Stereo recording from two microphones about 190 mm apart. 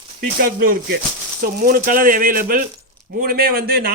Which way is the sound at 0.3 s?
50° right (ahead or behind).